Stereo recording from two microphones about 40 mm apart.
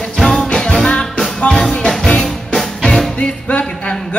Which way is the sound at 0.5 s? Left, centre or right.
Centre.